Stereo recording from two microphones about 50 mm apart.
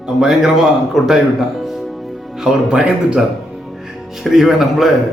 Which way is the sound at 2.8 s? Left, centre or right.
Right.